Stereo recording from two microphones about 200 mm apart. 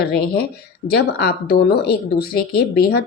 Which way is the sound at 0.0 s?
50° left (ahead or behind).